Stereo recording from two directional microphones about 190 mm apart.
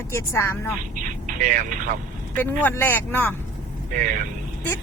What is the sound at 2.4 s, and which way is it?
Speech, 10° left (ahead or behind).